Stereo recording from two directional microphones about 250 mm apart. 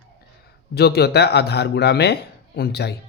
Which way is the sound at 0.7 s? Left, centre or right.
Left.